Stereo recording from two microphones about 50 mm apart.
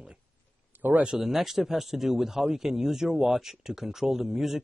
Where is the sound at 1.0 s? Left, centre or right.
Centre.